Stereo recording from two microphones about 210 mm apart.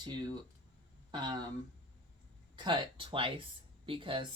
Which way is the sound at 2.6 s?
25° right (ahead or behind).